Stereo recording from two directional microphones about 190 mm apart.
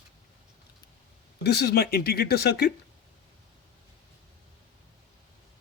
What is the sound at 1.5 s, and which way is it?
Speech, 60° left (ahead or behind).